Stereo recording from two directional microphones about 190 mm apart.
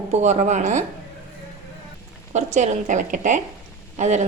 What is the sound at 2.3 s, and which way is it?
A woman's voice, 40° right (ahead or behind).